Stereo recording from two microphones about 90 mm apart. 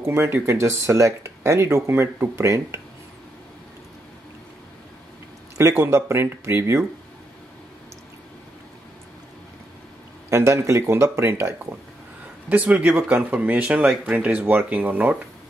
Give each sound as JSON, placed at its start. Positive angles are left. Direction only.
{"t": 0.0, "sound": "speech", "side_deg": -25}
{"t": 5.6, "sound": "speech", "side_deg": -30}
{"t": 10.3, "sound": "speech", "side_deg": -30}
{"t": 12.4, "sound": "speech", "side_deg": -15}